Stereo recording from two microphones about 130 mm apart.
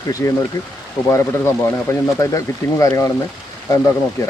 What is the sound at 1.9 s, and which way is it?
Speech, 20° left (ahead or behind).